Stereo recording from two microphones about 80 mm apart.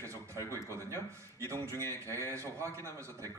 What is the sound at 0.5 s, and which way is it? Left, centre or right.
A man's voice, left.